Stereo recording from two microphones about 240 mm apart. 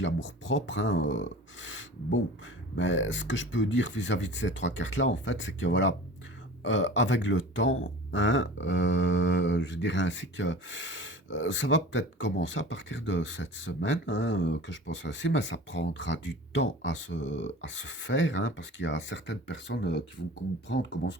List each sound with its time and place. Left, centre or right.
0.0 s speech: left